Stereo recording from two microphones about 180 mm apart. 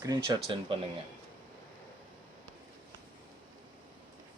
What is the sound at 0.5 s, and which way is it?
Speech, 30° right (ahead or behind).